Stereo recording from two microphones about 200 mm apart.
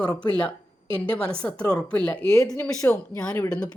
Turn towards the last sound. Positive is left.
turn(degrees=5)  # may be behind; listen again after turning